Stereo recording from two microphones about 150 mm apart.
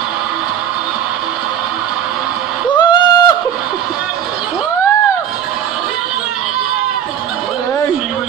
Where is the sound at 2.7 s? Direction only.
30° left (ahead or behind).